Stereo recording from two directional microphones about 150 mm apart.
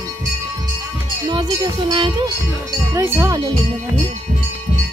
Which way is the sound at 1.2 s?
25° right (ahead or behind).